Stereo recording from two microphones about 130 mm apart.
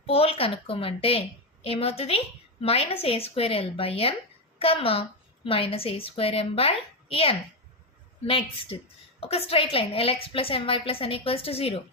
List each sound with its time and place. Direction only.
0.0 s a woman's voice: 50° left (ahead or behind)